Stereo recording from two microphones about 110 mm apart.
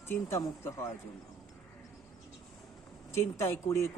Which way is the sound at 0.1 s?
25° left (ahead or behind).